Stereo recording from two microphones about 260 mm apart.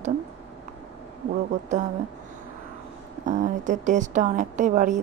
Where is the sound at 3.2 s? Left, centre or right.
Right.